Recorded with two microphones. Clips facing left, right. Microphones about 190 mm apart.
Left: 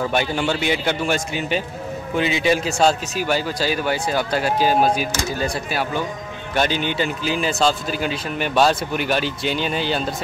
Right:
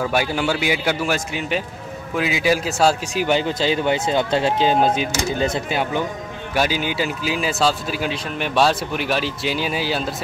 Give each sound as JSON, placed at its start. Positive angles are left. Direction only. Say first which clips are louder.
{"t": 0.1, "sound": "a man's voice", "louder": "even", "side_deg": -5}
{"t": 3.2, "sound": "speech", "louder": "right 2 dB", "side_deg": -20}
{"t": 6.5, "sound": "speech", "louder": "even", "side_deg": -5}